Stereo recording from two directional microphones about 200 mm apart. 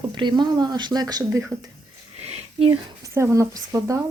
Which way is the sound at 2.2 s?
30° right (ahead or behind).